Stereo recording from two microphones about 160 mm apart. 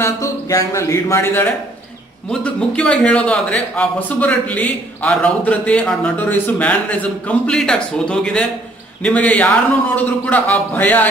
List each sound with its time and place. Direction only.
0.0 s a man's voice: 20° left (ahead or behind)